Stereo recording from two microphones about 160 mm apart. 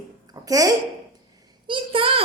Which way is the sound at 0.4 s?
20° right (ahead or behind).